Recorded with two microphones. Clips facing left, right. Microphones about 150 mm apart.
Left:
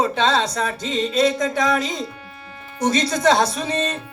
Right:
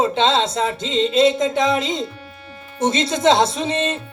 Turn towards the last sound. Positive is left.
turn(degrees=-25)  # may be behind; listen again after turning